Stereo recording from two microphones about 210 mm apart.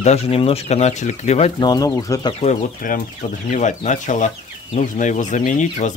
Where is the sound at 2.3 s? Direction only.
35° left (ahead or behind).